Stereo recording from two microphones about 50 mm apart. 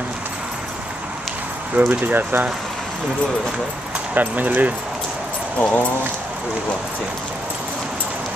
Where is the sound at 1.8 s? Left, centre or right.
Right.